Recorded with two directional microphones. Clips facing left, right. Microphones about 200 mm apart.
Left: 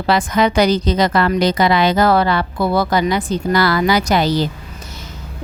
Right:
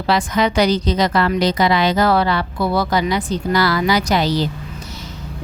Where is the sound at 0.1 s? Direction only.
50° left (ahead or behind).